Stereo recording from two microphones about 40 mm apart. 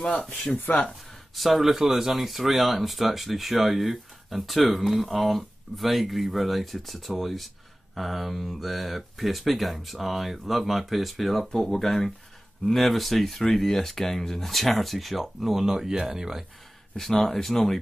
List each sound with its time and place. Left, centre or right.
0.1 s speech: left
0.6 s speech: left
1.3 s speech: centre
17.2 s speech: centre